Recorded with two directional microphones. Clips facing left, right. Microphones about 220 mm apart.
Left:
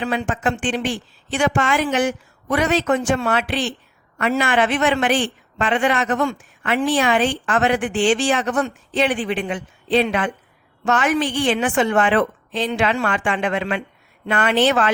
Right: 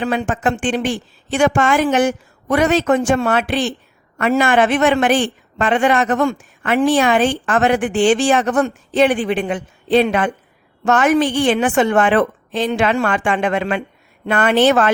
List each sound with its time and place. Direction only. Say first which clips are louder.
0.0 s a man's voice: right 3 dB; 45° right (ahead or behind)